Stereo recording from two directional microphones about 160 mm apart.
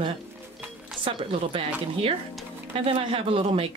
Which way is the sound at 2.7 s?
35° right (ahead or behind).